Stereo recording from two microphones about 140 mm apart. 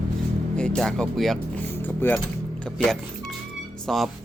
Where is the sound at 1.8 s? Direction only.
15° left (ahead or behind).